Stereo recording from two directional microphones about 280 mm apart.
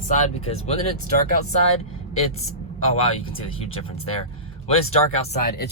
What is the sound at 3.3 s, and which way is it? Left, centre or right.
Speech, centre.